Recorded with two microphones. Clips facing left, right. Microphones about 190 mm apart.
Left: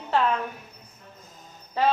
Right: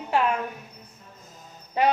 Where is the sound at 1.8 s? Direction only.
15° right (ahead or behind).